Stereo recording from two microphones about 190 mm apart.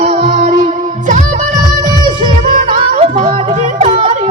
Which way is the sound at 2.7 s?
35° right (ahead or behind).